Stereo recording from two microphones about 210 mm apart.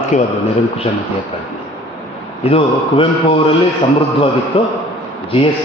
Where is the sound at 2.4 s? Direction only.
25° left (ahead or behind).